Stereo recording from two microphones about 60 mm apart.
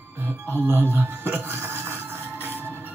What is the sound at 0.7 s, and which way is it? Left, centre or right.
Music, right.